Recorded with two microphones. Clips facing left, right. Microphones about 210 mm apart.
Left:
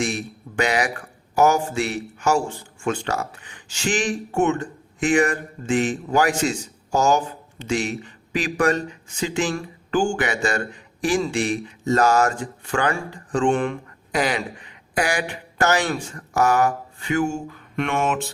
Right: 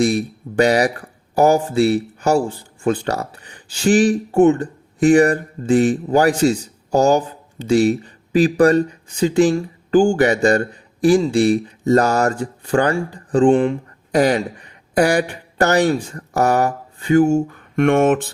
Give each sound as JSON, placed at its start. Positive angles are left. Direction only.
{"t": 0.0, "sound": "speech", "side_deg": -35}
{"t": 14.2, "sound": "speech", "side_deg": -40}